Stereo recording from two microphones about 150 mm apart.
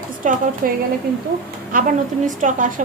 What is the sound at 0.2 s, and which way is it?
Speech, 60° right (ahead or behind).